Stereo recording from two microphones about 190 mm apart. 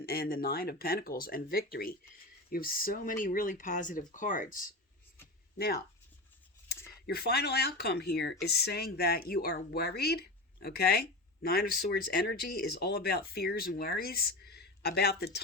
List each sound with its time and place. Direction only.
0.0 s speech: 55° left (ahead or behind)
5.5 s speech: 55° left (ahead or behind)
7.1 s speech: 55° left (ahead or behind)